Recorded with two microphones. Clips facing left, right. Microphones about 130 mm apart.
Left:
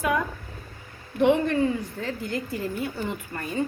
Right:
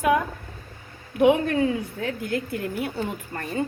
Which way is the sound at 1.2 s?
55° right (ahead or behind).